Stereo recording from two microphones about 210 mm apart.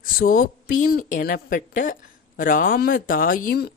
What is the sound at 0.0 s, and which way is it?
Speech, 45° left (ahead or behind).